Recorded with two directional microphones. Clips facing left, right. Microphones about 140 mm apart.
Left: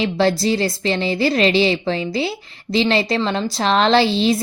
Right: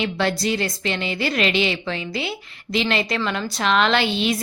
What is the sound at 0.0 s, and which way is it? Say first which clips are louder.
A woman's voice: left 5 dB; 30° left (ahead or behind).